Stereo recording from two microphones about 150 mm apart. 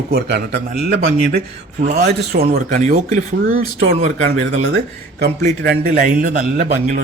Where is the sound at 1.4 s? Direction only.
50° right (ahead or behind).